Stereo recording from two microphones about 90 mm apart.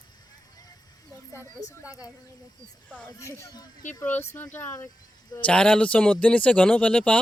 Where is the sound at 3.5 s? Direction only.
45° left (ahead or behind).